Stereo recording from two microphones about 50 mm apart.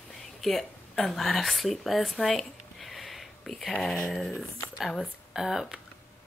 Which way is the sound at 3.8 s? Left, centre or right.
Centre.